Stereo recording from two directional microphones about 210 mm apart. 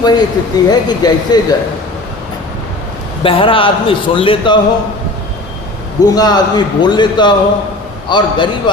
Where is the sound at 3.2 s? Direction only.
25° left (ahead or behind).